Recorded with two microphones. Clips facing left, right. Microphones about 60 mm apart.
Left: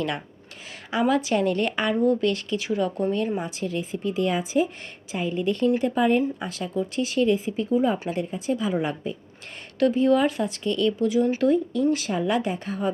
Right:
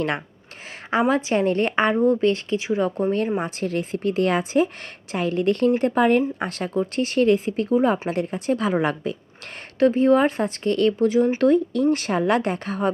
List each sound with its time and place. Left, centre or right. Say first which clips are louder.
0.9 s a woman's voice: right 2 dB; right
3.4 s speech: right 3 dB; right
9.9 s speech: right 1 dB; right
11.3 s speech: right 3 dB; right